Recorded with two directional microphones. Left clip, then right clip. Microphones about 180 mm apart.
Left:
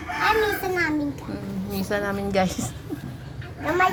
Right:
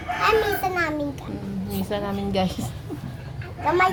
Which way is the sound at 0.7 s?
35° right (ahead or behind).